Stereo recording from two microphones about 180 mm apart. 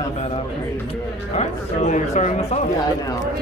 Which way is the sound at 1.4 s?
40° left (ahead or behind).